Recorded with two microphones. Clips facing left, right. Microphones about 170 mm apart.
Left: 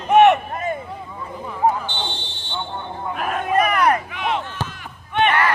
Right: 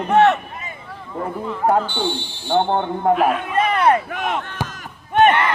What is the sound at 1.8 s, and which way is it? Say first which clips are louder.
Speech: right 6 dB; 10° right (ahead or behind).